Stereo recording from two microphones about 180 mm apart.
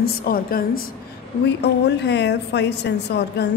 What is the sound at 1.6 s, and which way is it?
A woman's voice, 70° left (ahead or behind).